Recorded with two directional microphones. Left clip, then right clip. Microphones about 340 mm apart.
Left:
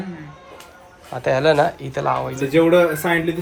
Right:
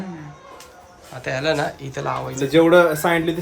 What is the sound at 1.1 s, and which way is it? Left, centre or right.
Speech, centre.